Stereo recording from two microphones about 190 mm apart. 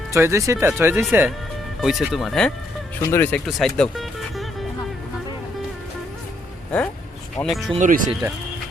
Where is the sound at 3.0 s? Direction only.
10° left (ahead or behind).